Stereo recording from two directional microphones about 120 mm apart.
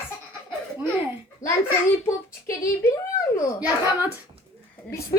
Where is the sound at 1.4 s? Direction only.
25° left (ahead or behind).